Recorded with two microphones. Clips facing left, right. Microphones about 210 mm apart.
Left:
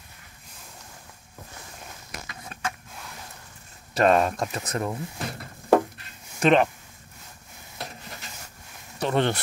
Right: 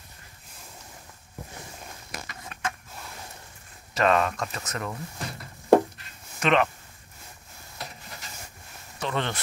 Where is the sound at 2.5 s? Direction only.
40° left (ahead or behind).